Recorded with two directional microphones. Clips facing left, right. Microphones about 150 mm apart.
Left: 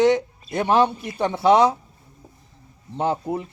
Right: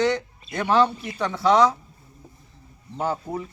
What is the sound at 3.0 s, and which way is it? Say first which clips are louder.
Speech: left 3 dB; 25° left (ahead or behind).